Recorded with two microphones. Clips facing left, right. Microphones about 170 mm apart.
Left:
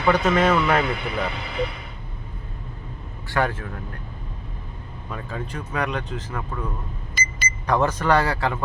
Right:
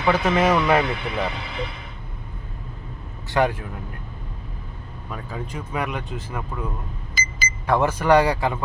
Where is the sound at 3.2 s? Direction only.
15° right (ahead or behind).